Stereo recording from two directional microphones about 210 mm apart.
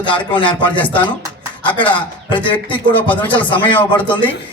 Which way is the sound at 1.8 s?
25° left (ahead or behind).